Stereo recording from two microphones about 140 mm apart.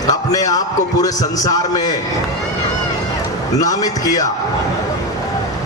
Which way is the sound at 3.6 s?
25° left (ahead or behind).